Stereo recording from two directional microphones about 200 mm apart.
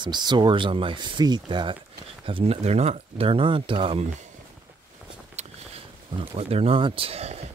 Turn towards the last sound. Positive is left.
turn(degrees=-30)  # may be behind; listen again after turning